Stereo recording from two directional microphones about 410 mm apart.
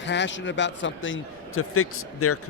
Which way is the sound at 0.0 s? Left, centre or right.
Left.